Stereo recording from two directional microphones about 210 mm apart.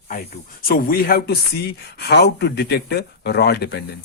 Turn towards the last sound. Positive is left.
turn(degrees=50)  # may be behind; listen again after turning